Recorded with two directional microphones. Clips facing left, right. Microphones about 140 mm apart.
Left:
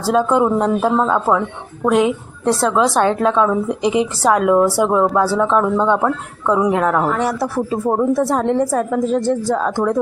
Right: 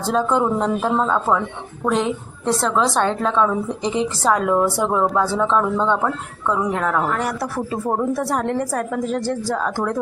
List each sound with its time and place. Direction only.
0.1 s a woman's voice: 5° left (ahead or behind)